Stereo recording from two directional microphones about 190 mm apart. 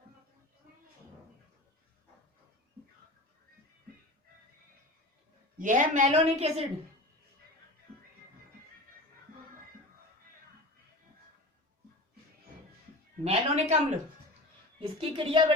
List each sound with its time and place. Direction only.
5.5 s a man's voice: 45° right (ahead or behind)
6.1 s a woman's voice: 30° right (ahead or behind)
13.2 s a sound: 35° right (ahead or behind)
14.8 s a woman's voice: 30° right (ahead or behind)